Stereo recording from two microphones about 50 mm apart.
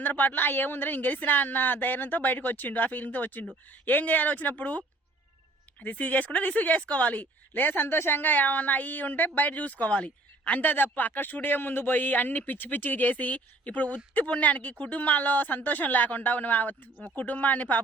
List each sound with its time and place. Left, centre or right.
0.0 s speech: left
5.8 s speech: left